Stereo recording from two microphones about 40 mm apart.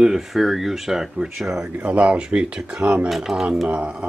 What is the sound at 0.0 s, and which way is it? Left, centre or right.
Speech, centre.